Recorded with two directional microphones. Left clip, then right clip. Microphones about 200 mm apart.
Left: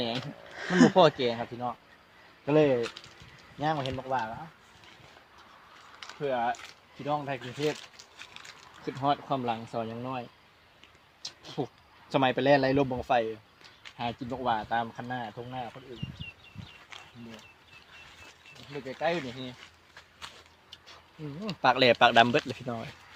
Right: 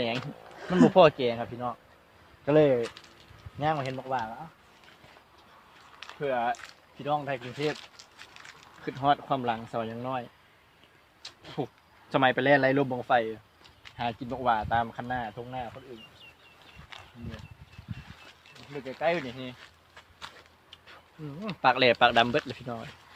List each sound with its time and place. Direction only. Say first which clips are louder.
0.6 s speech: even; centre (ahead or behind)
0.9 s speech: right 2 dB; 10° right (ahead or behind)
6.0 s speech: right 1 dB; 5° right (ahead or behind)
7.4 s speech: even; 15° right (ahead or behind)
8.2 s a sound: left 2 dB; 10° right (ahead or behind)
8.6 s a sound: right 1 dB; 5° left (ahead or behind)
9.0 s speech: right 3 dB; centre (ahead or behind)
11.4 s a man's voice: right 1 dB; 5° left (ahead or behind); by 15.5 s 10° right (ahead or behind)
18.6 s speech: right 2 dB; centre (ahead or behind)
21.4 s speech: even; 35° left (ahead or behind)